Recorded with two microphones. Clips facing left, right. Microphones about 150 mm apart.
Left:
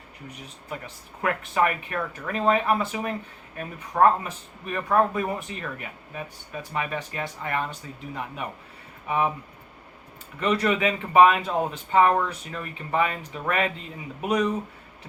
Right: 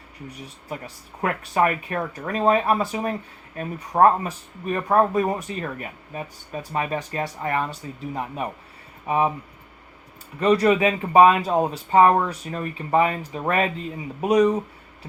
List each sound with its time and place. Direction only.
1.2 s speech: 35° right (ahead or behind)
10.4 s speech: 35° right (ahead or behind)